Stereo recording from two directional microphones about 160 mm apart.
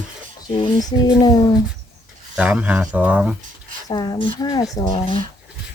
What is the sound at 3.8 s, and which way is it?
Speech, 25° left (ahead or behind).